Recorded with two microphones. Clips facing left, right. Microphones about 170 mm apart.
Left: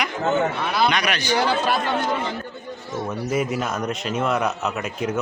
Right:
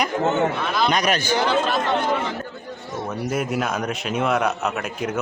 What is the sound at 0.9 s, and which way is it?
Speech, 45° right (ahead or behind).